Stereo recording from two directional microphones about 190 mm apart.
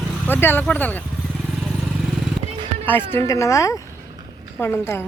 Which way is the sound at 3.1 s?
15° left (ahead or behind).